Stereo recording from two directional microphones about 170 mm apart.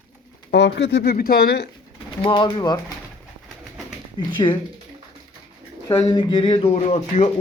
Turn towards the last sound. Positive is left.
turn(degrees=40)  # may be behind; listen again after turning